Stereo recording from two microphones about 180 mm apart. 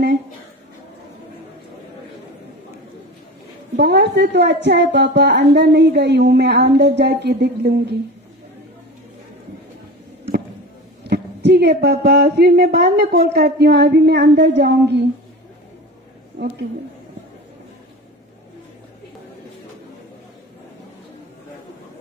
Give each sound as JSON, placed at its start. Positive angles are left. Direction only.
{"t": 3.7, "sound": "a woman's voice", "side_deg": -70}
{"t": 11.1, "sound": "a sound", "side_deg": -65}
{"t": 11.8, "sound": "speech", "side_deg": -65}